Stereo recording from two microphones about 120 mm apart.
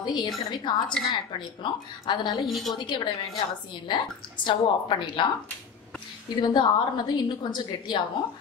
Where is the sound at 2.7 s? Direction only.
40° left (ahead or behind).